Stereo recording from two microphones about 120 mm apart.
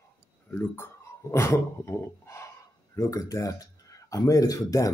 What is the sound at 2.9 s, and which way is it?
Speech, 25° left (ahead or behind).